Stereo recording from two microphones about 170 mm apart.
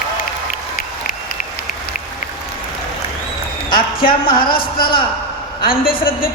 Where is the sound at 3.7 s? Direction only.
60° left (ahead or behind).